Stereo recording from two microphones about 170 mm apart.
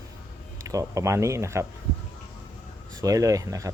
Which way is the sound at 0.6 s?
20° right (ahead or behind).